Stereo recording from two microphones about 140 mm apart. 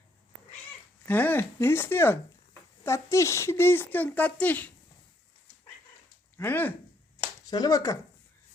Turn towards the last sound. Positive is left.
turn(degrees=25)  # may be behind; listen again after turning